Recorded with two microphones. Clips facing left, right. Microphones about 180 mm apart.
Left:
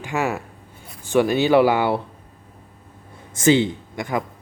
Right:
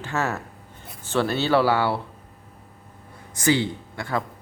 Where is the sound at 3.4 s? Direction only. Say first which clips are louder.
Left 5 dB; 20° left (ahead or behind).